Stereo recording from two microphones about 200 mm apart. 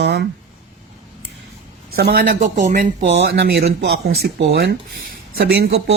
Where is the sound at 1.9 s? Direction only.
45° right (ahead or behind).